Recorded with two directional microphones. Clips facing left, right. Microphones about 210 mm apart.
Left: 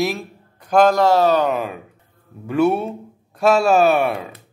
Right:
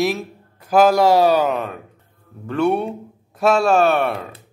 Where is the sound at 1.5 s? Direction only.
5° left (ahead or behind).